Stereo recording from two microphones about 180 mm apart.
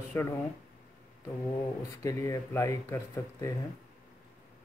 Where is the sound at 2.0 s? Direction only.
20° left (ahead or behind).